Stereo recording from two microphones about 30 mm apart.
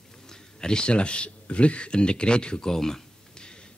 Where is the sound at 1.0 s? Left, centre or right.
Left.